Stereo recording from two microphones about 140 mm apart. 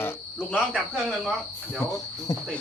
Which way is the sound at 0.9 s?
Centre (ahead or behind).